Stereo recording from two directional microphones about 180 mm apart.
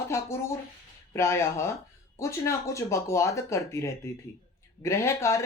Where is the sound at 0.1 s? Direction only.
15° left (ahead or behind).